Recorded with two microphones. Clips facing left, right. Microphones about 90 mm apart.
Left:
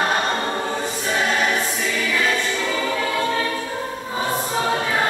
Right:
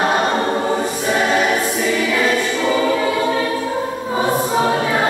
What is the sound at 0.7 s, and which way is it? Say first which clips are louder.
Choir: right 6 dB; 10° right (ahead or behind).